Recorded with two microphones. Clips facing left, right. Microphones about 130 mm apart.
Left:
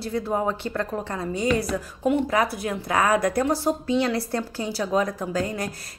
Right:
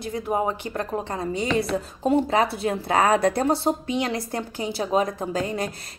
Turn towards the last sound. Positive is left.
turn(degrees=-20)  # may be behind; listen again after turning